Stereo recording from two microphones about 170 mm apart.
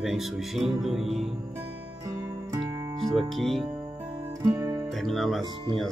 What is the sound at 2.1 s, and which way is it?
Music, 20° right (ahead or behind).